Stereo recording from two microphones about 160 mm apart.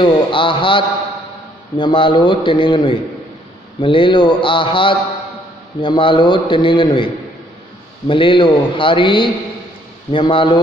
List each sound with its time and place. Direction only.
0.0 s a man's voice: 30° left (ahead or behind)
8.1 s a man's voice: 30° left (ahead or behind)